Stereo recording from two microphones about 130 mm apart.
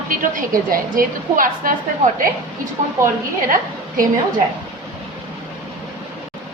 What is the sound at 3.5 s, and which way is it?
Speech, 90° right.